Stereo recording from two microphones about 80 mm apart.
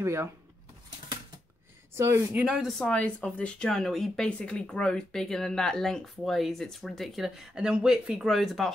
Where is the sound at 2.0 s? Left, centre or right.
Right.